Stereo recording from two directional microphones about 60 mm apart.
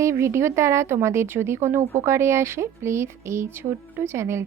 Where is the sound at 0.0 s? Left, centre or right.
Right.